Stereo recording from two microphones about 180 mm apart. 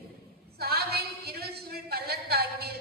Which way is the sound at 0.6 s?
60° right (ahead or behind).